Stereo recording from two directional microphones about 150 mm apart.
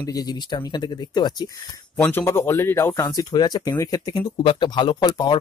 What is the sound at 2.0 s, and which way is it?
Speech, 15° left (ahead or behind).